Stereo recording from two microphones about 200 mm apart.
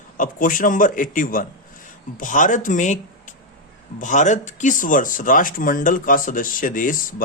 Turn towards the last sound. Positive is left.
turn(degrees=45)  # may be behind; listen again after turning